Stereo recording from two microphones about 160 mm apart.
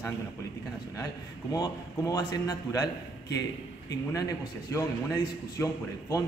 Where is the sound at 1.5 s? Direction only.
25° left (ahead or behind).